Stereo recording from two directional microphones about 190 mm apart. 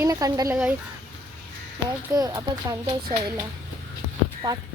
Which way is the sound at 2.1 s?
20° right (ahead or behind).